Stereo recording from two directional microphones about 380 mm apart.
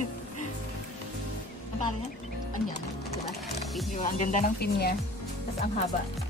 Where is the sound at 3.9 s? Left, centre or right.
Centre.